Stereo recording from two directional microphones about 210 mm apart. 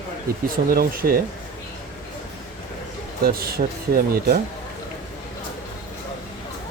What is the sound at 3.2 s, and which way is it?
Speech, 45° right (ahead or behind).